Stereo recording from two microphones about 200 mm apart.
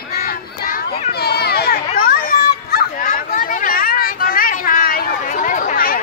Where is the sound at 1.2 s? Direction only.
50° left (ahead or behind).